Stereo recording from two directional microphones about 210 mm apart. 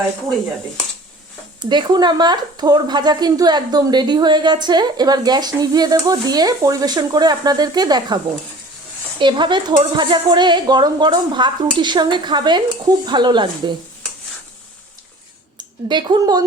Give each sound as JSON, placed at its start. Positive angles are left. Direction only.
{"t": 1.5, "sound": "speech", "side_deg": -20}
{"t": 15.9, "sound": "speech", "side_deg": -20}